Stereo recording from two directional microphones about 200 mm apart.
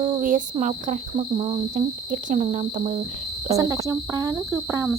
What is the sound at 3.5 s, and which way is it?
Speech, 15° right (ahead or behind).